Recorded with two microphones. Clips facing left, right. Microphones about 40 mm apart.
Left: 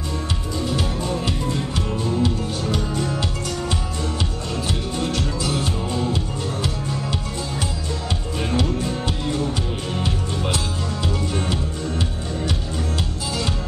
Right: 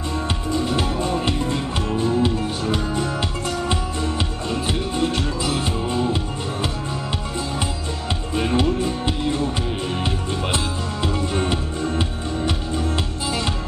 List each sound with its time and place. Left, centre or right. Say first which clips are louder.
0.7 s music: left 1 dB; right
8.4 s music: right 4 dB; right